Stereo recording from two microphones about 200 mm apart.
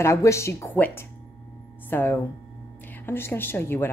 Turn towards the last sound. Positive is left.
turn(degrees=10)  # may be behind; listen again after turning